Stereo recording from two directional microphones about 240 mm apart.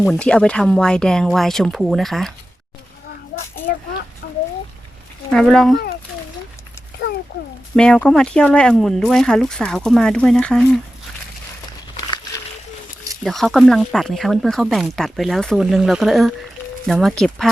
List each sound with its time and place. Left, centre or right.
0.0 s speech: centre
3.3 s a sound: left
5.3 s speech: centre
7.8 s speech: centre
13.2 s speech: centre